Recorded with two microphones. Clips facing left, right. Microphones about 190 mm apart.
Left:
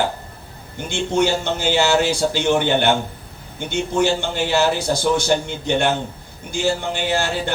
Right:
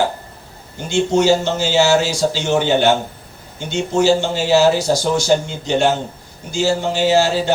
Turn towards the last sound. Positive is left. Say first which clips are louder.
# right 7 dB
turn(degrees=55)  # may be behind; listen again after turning